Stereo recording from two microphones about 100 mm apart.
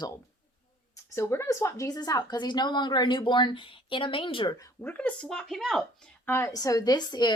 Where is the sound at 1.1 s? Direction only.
25° left (ahead or behind); by 4.4 s 60° left (ahead or behind).